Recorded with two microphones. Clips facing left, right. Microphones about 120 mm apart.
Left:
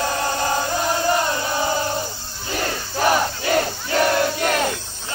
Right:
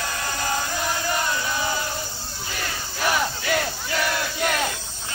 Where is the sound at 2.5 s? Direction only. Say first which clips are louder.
Left 8 dB; 40° left (ahead or behind).